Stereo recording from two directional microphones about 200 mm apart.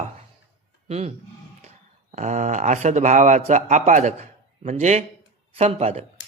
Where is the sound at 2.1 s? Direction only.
35° right (ahead or behind).